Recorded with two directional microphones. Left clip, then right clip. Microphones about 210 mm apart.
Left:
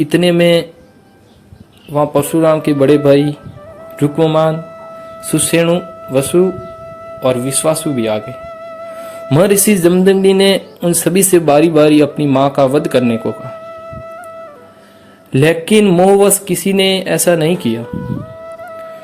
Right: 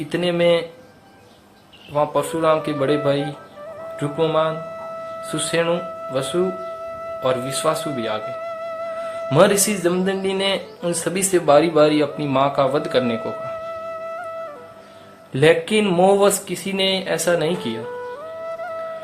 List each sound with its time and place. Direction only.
0.1 s speech: 35° left (ahead or behind)
1.9 s speech: 25° left (ahead or behind)
4.6 s music: centre (ahead or behind)
5.3 s speech: 30° left (ahead or behind)
6.4 s music: centre (ahead or behind)
7.3 s speech: 25° left (ahead or behind)
8.2 s music: centre (ahead or behind)
9.3 s speech: 30° left (ahead or behind)
13.1 s music: centre (ahead or behind)
15.3 s speech: 30° left (ahead or behind)
17.7 s music: centre (ahead or behind)